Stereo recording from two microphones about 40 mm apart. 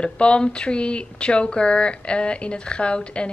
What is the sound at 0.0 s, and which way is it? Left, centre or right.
Speech, left.